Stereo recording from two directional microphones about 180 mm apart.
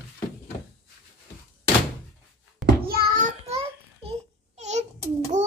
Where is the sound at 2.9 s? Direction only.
55° right (ahead or behind).